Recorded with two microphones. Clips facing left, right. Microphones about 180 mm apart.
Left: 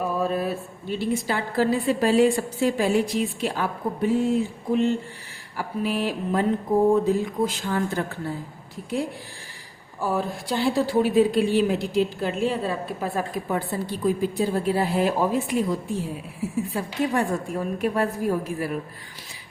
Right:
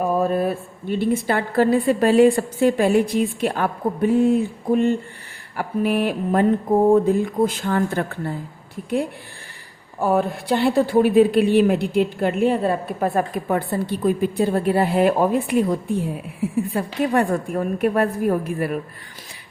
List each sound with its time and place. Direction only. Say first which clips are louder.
0.0 s a woman's voice: right 5 dB; 50° right (ahead or behind)
10.0 s a woman's voice: right 6 dB; 60° right (ahead or behind)
16.7 s a woman's voice: right 4 dB; 55° right (ahead or behind)